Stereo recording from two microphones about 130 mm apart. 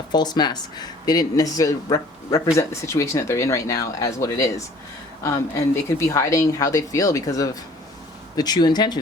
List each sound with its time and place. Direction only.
0.1 s speech: 35° left (ahead or behind)